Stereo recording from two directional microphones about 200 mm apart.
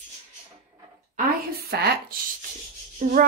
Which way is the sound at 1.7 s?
50° right (ahead or behind).